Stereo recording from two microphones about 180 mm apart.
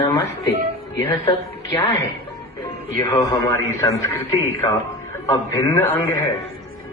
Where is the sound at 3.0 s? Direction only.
15° left (ahead or behind).